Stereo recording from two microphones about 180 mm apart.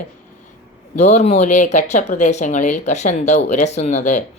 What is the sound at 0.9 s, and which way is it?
Speech, 40° left (ahead or behind).